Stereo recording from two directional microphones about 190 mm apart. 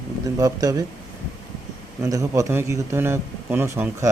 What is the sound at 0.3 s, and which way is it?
Speech, 20° right (ahead or behind).